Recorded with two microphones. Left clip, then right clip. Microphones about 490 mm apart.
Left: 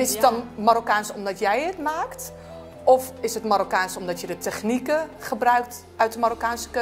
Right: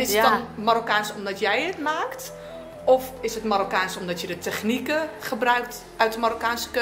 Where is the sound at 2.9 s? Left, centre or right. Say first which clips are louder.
Left 2 dB; left.